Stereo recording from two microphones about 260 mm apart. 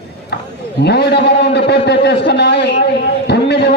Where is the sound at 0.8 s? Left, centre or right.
Left.